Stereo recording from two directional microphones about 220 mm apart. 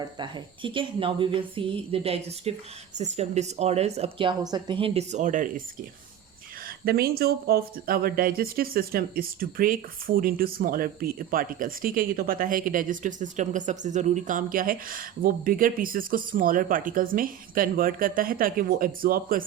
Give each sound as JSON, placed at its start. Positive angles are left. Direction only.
{"t": 0.0, "sound": "speech", "side_deg": -20}
{"t": 6.8, "sound": "speech", "side_deg": -45}